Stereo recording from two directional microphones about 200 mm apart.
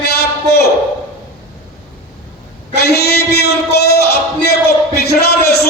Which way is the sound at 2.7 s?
55° left (ahead or behind).